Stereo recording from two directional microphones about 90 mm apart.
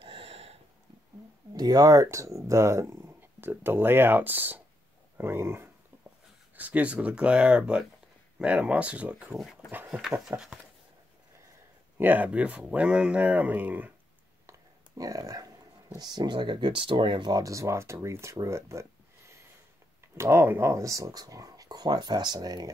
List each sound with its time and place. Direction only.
0.0 s a sound: 90° right
1.5 s speech: 45° right (ahead or behind); by 9.3 s 15° right (ahead or behind)
9.3 s speech: centre (ahead or behind)
12.0 s speech: 20° right (ahead or behind)
15.0 s speech: 40° right (ahead or behind)
16.0 s speech: 55° right (ahead or behind)